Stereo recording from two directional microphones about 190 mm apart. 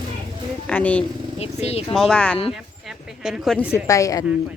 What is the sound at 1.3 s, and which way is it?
Speech, 35° left (ahead or behind).